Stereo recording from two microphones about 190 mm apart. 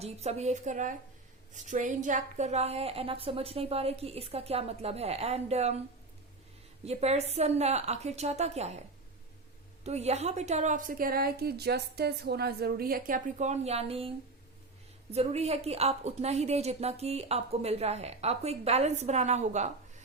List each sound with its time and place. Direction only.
0.0 s a woman's voice: 35° right (ahead or behind)
6.8 s a woman's voice: 35° right (ahead or behind)
9.8 s a woman's voice: 35° right (ahead or behind)
15.1 s a woman's voice: 35° right (ahead or behind)